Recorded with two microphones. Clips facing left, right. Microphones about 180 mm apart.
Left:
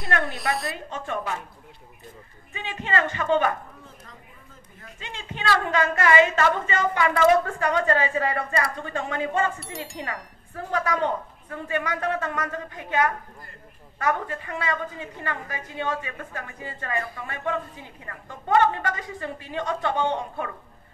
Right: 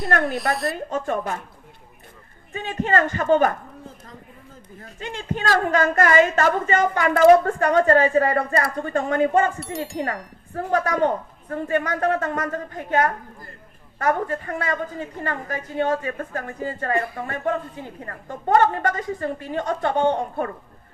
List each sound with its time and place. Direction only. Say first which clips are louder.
0.3 s speech: right 4 dB; centre (ahead or behind)
0.7 s a woman's voice: right 6 dB; 40° right (ahead or behind)
2.5 s a woman's voice: right 5 dB; 45° right (ahead or behind)
4.8 s a woman's voice: right 9 dB; 45° right (ahead or behind)
9.6 s speech: right 7 dB; centre (ahead or behind)
9.9 s a woman's voice: right 7 dB; 45° right (ahead or behind)